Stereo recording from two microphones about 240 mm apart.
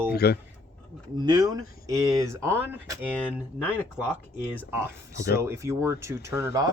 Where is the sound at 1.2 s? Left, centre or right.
Centre.